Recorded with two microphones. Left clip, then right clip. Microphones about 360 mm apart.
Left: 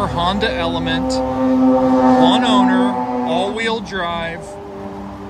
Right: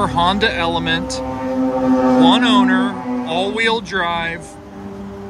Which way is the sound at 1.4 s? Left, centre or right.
Left.